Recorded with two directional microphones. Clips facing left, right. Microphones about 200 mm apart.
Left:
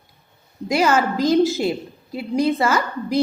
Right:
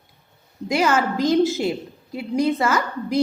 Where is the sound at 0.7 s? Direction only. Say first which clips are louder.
Left 2 dB; 35° left (ahead or behind).